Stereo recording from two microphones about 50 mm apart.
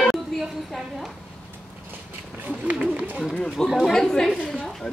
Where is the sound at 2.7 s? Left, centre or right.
Right.